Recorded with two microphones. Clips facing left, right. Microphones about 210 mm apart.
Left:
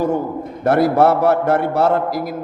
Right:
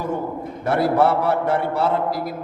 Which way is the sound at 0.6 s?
40° left (ahead or behind).